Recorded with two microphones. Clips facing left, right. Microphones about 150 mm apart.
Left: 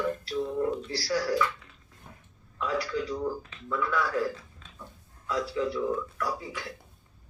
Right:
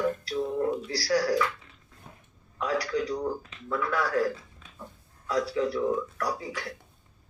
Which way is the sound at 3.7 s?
40° right (ahead or behind).